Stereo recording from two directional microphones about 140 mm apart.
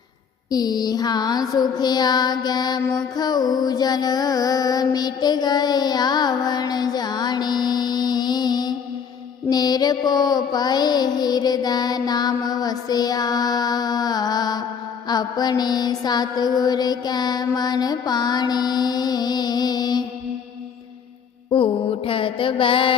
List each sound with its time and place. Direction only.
0.5 s child singing: 30° left (ahead or behind)
3.2 s music: 30° left (ahead or behind)
9.5 s child singing: 30° left (ahead or behind)
15.0 s mantra: 30° left (ahead or behind)
21.5 s mantra: 40° left (ahead or behind)